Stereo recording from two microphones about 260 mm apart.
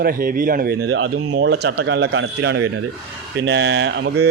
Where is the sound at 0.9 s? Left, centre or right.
Right.